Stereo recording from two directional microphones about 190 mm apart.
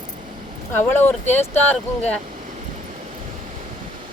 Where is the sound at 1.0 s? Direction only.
10° left (ahead or behind).